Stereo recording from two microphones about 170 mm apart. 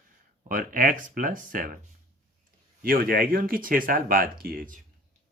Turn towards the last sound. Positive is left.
turn(degrees=-60)  # may be behind; listen again after turning